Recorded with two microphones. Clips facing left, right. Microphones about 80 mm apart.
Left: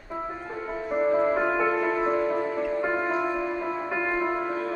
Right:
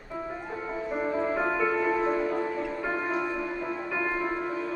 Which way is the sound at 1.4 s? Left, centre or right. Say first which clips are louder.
Left 2 dB; centre.